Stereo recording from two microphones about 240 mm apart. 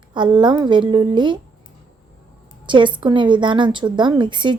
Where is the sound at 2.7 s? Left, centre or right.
Centre.